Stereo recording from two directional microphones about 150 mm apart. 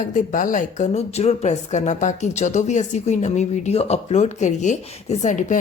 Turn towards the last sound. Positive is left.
turn(degrees=55)  # may be behind; listen again after turning